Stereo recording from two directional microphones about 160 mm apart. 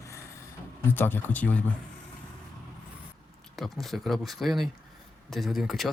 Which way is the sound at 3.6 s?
Centre (ahead or behind).